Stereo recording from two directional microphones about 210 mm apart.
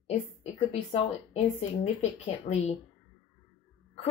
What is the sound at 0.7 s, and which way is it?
Speech, 30° left (ahead or behind).